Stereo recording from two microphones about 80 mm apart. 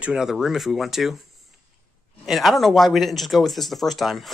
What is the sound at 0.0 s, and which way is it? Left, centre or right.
Speech, centre.